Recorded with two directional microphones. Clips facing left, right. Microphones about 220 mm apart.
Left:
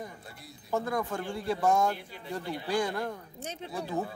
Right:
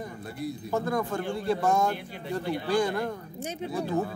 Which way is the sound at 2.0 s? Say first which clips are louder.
Right 5 dB; 65° right (ahead or behind).